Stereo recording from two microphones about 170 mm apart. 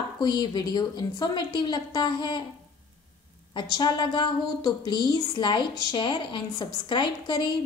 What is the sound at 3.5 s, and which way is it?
A woman's voice, 25° left (ahead or behind).